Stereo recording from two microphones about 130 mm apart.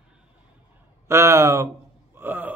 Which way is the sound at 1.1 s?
20° right (ahead or behind).